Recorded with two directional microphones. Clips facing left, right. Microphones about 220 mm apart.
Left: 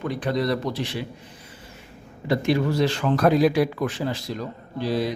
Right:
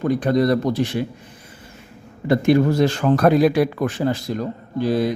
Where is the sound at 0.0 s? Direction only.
45° right (ahead or behind).